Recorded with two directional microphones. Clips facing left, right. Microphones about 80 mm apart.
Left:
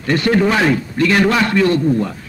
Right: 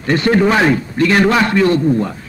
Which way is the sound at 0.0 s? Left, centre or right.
Right.